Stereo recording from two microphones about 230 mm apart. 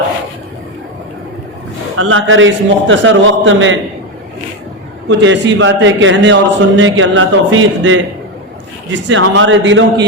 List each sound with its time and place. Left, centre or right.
2.0 s a man's voice: right
5.0 s a man's voice: right